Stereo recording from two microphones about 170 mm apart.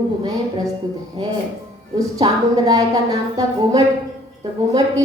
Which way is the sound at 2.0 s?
20° right (ahead or behind).